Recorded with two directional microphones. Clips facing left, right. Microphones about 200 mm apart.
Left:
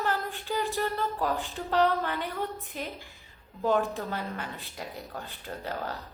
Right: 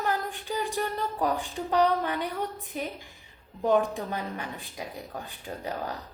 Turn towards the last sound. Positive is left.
turn(degrees=-15)  # may be behind; listen again after turning